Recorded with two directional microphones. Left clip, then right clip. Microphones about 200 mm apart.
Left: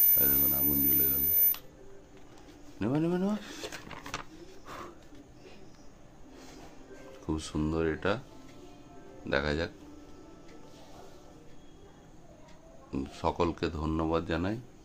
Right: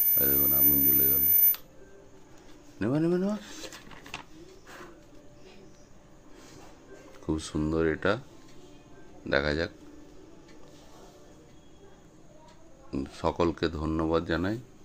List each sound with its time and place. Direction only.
0.3 s speech: 15° right (ahead or behind)
2.8 s speech: 15° right (ahead or behind)
3.3 s speech: 30° left (ahead or behind)
4.0 s a sound: 50° left (ahead or behind)
7.2 s speech: 20° right (ahead or behind)
9.3 s speech: 15° right (ahead or behind)
12.9 s speech: 15° right (ahead or behind)